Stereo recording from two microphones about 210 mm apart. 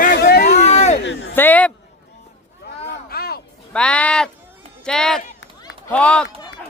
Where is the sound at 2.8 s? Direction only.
50° left (ahead or behind).